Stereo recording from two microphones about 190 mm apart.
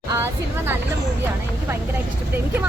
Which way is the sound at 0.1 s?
15° right (ahead or behind).